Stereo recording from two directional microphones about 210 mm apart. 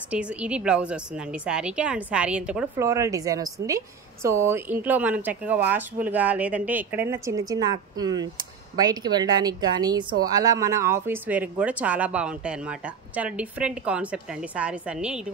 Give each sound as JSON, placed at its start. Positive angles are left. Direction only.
{"t": 0.1, "sound": "a woman's voice", "side_deg": -5}